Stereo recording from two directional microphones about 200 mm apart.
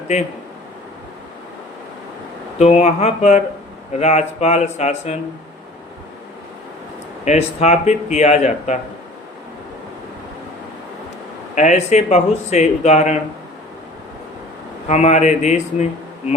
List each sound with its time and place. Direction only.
2.6 s speech: 35° left (ahead or behind)
7.3 s speech: 35° left (ahead or behind)
11.5 s speech: 35° left (ahead or behind)
14.8 s speech: 35° left (ahead or behind)